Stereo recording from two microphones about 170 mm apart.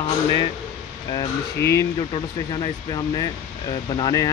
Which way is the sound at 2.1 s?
25° left (ahead or behind).